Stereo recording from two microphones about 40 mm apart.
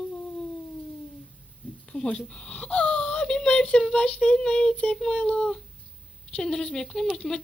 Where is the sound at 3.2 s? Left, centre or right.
Centre.